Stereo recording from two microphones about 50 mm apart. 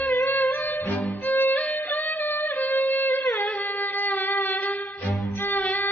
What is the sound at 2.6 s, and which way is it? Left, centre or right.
Music, left.